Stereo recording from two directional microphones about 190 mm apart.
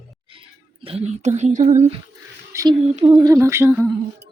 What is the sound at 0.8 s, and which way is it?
Speech, 35° right (ahead or behind).